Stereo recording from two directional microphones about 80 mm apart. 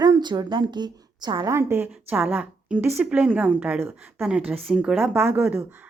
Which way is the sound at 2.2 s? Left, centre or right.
Centre.